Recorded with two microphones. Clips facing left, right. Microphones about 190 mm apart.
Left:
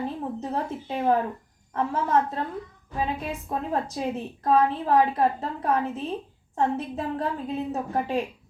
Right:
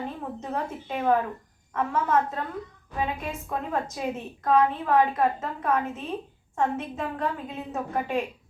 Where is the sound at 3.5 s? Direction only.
35° left (ahead or behind).